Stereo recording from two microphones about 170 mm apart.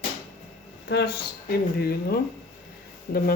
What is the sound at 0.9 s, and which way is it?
Speech, 75° left (ahead or behind).